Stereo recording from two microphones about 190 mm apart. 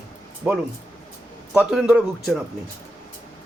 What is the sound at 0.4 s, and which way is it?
Speech, 10° right (ahead or behind).